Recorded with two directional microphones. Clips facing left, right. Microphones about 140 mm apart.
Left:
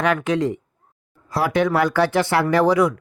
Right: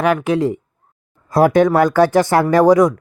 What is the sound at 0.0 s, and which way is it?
Speech, 30° right (ahead or behind).